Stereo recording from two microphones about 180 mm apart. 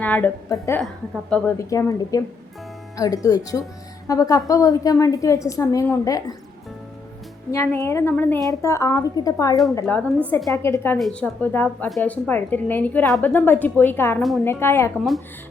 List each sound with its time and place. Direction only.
0.0 s a woman's voice: 10° left (ahead or behind)
0.8 s a woman's voice: 5° left (ahead or behind)
1.5 s a woman's voice: 20° left (ahead or behind)
7.5 s a woman's voice: 15° left (ahead or behind)
10.9 s a woman's voice: 5° left (ahead or behind)
14.2 s a woman's voice: centre (ahead or behind)
14.4 s a woman's voice: 10° left (ahead or behind)